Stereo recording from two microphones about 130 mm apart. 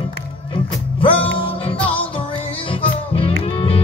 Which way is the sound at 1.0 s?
45° left (ahead or behind).